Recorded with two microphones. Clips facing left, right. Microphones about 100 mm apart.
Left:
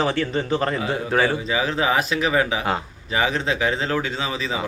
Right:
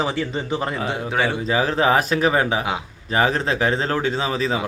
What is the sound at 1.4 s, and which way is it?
A man's voice, 40° right (ahead or behind).